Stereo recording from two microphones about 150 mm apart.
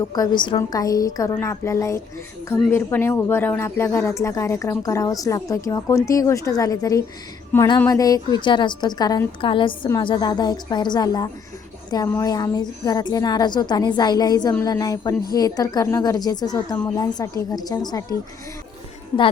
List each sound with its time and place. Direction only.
0.1 s speech: 30° left (ahead or behind)
19.1 s speech: 20° left (ahead or behind)